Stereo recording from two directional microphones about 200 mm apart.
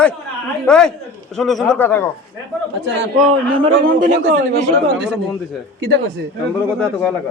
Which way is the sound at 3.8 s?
45° right (ahead or behind).